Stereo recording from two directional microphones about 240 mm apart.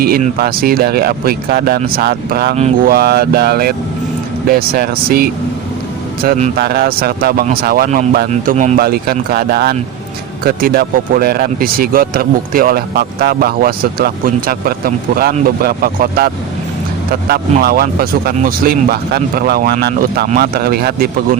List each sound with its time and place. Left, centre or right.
0.0 s speech: right